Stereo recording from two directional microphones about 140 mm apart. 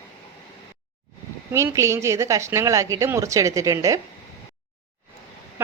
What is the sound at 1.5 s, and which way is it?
A woman's voice, 20° right (ahead or behind).